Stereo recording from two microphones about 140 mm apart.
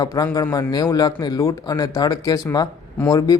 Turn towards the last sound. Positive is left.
turn(degrees=25)  # may be behind; listen again after turning